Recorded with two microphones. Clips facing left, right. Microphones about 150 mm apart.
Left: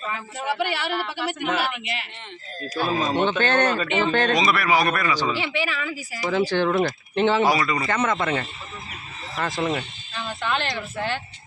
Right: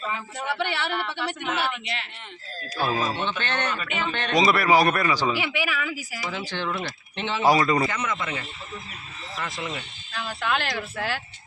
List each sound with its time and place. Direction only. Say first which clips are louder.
0.3 s a woman's voice: left 3 dB; 5° left (ahead or behind)
3.2 s speech: left 8 dB; 45° left (ahead or behind)
4.4 s a man's voice: right 2 dB; 30° right (ahead or behind)
5.2 s speech: left 1 dB; 10° right (ahead or behind)
6.3 s speech: left 11 dB; 45° left (ahead or behind)
7.4 s a man's voice: right 2 dB; 30° right (ahead or behind)
7.9 s speech: left 6 dB; 55° left (ahead or behind)
10.2 s speech: left 1 dB; 5° right (ahead or behind)